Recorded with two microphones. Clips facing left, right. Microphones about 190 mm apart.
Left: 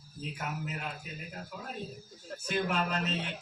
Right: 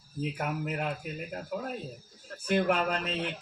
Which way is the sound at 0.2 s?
55° right (ahead or behind).